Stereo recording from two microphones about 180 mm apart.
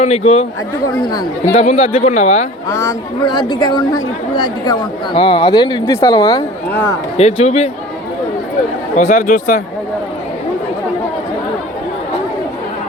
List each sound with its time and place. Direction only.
0.0 s speech: 35° left (ahead or behind)
1.6 s speech: 35° left (ahead or behind)
2.6 s speech: 20° left (ahead or behind)
5.9 s speech: 15° left (ahead or behind)
7.2 s speech: 35° left (ahead or behind)
9.0 s speech: 50° left (ahead or behind)